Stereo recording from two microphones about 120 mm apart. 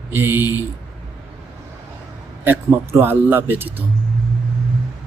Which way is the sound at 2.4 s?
20° right (ahead or behind).